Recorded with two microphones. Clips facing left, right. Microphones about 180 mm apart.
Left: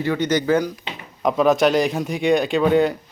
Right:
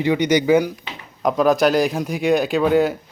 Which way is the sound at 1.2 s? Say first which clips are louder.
Even; centre (ahead or behind).